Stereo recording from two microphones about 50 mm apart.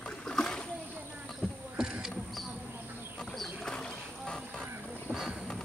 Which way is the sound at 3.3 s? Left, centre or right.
Centre.